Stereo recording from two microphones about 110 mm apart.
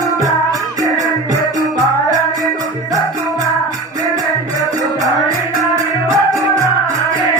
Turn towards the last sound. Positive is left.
turn(degrees=-30)  # may be behind; listen again after turning